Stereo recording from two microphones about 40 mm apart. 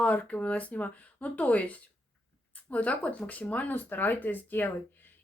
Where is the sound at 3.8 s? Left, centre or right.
Left.